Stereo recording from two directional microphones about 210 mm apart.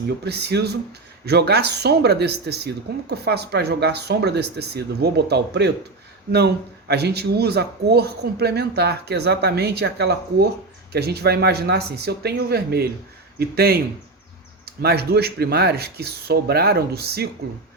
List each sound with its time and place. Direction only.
0.3 s speech: 50° right (ahead or behind)